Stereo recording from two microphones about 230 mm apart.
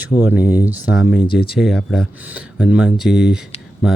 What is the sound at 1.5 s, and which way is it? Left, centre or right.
Speech, centre.